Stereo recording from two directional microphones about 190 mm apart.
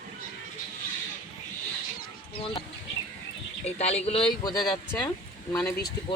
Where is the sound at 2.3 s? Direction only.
25° left (ahead or behind).